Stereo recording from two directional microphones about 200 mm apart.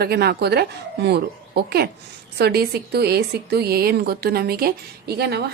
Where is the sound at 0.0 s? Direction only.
50° right (ahead or behind).